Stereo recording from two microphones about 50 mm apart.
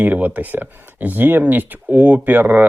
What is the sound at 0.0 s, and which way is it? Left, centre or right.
Speech, right.